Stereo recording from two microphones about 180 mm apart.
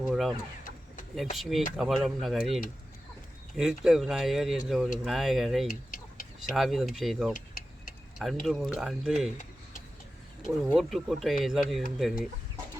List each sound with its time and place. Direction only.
0.0 s speech: centre (ahead or behind)
1.4 s speech: centre (ahead or behind)
3.6 s speech: 5° right (ahead or behind)
5.6 s chicken: 50° left (ahead or behind)
6.5 s speech: centre (ahead or behind)
7.3 s vehicle: 50° left (ahead or behind)
8.2 s speech: centre (ahead or behind)
10.7 s speech: centre (ahead or behind)